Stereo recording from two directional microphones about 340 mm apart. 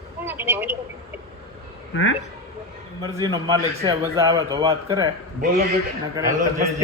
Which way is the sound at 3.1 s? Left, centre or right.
Centre.